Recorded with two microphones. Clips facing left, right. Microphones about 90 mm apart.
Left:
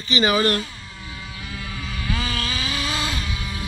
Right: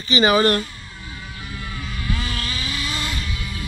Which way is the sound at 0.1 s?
45° right (ahead or behind).